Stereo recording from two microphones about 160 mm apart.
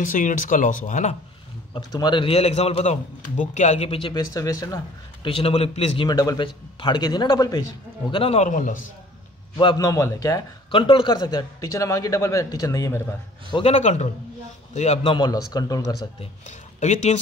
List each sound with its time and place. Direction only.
0.0 s speech: 55° left (ahead or behind)
1.7 s a man's voice: 25° left (ahead or behind)
5.3 s a man's voice: 40° left (ahead or behind)
6.0 s a man's voice: 25° left (ahead or behind)
8.1 s a man's voice: 35° left (ahead or behind)
8.5 s speech: 55° left (ahead or behind)
9.6 s a man's voice: 25° left (ahead or behind)
10.7 s a man's voice: 30° left (ahead or behind)
13.5 s speech: 35° left (ahead or behind)
15.1 s a man's voice: 25° left (ahead or behind)
16.2 s speech: 45° left (ahead or behind)